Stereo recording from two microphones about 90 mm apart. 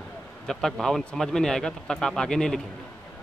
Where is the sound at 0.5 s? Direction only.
5° left (ahead or behind).